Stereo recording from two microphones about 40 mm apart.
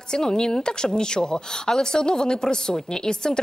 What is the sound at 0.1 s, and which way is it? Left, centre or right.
A woman's voice, centre.